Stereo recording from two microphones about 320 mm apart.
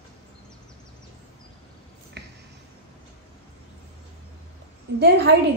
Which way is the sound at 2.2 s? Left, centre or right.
Right.